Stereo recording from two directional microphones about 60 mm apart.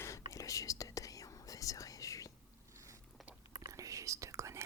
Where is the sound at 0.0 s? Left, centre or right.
Left.